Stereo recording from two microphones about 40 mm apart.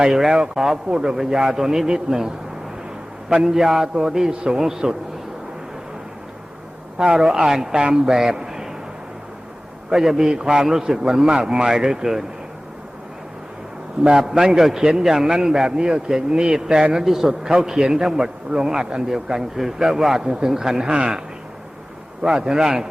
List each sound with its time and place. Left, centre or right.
0.1 s a man's voice: centre
1.1 s a man's voice: centre
7.0 s a man's voice: centre
8.1 s a man's voice: centre
9.9 s a man's voice: centre
14.3 s a man's voice: centre
22.2 s a man's voice: centre